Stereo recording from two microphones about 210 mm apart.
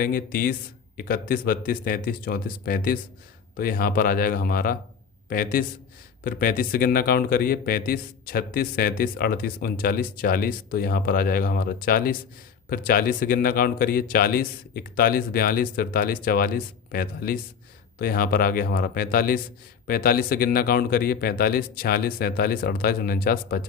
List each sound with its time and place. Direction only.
0.0 s a man's voice: 45° left (ahead or behind)